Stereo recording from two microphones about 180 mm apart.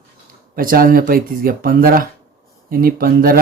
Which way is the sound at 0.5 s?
50° right (ahead or behind).